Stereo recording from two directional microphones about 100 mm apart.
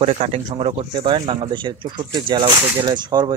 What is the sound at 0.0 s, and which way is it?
Speech, 90° right.